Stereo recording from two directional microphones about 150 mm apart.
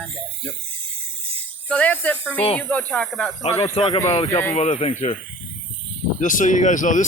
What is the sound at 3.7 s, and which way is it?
Speech, 35° left (ahead or behind).